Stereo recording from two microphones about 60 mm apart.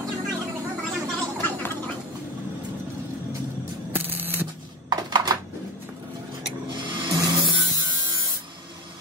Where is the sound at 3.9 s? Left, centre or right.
Right.